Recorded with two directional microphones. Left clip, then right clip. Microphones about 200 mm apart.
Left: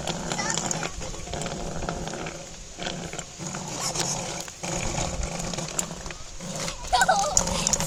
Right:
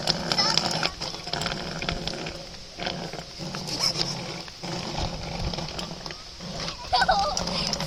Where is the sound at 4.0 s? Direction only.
40° left (ahead or behind).